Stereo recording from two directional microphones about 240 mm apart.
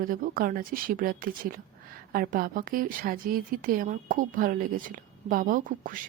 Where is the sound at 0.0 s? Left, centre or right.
Right.